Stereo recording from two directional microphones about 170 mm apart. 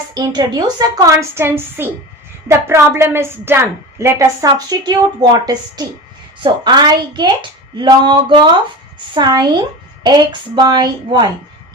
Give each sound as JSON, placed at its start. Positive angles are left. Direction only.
{"t": 0.1, "sound": "a woman's voice", "side_deg": -25}